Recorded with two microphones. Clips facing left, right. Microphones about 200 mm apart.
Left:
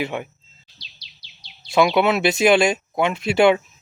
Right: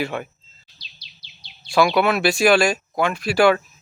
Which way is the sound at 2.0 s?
20° left (ahead or behind).